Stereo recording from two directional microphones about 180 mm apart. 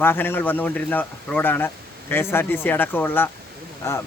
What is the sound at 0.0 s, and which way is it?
Speech, 10° left (ahead or behind).